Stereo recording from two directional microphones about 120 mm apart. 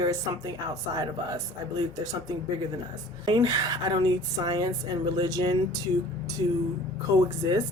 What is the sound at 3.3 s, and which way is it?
Speech, 35° right (ahead or behind).